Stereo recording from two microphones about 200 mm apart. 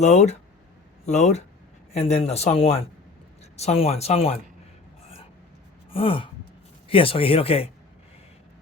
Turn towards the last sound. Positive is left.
turn(degrees=30)  # may be behind; listen again after turning